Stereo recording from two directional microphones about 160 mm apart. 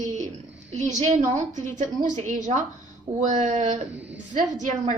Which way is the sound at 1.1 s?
50° right (ahead or behind).